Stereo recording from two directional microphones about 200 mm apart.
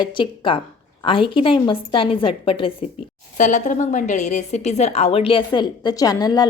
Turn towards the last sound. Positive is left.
turn(degrees=20)  # may be behind; listen again after turning